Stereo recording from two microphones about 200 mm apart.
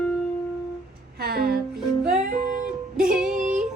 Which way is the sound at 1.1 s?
50° right (ahead or behind).